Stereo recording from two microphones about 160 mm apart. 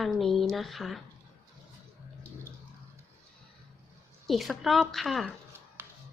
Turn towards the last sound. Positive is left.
turn(degrees=0)  # may be behind; listen again after turning